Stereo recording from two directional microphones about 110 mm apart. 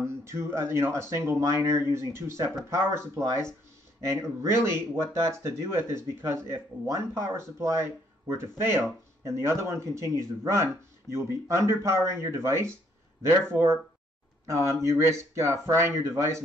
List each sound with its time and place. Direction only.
0.0 s speech: 25° right (ahead or behind)